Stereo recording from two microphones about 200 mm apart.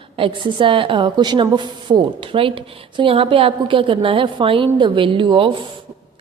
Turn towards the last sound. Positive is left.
turn(degrees=-25)  # may be behind; listen again after turning